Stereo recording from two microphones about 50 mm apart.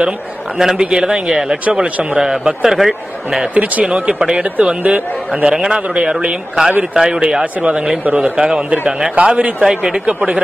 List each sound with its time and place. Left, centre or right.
0.6 s speech: centre
4.8 s speech: centre
8.2 s speech: centre
9.2 s speech: right
9.6 s speech: centre
10.0 s speech: right